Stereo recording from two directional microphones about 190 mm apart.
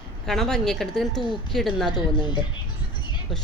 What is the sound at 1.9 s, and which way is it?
Speech, 25° left (ahead or behind).